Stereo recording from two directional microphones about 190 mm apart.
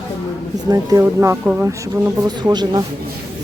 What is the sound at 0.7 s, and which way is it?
Speech, 20° right (ahead or behind).